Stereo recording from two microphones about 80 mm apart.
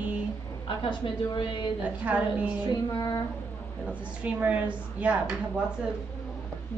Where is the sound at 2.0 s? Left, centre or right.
Centre.